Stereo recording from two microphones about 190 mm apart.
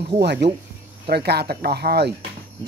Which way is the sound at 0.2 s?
60° right (ahead or behind).